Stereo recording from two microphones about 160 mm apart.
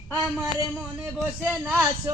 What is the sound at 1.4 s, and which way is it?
Speech, 10° right (ahead or behind).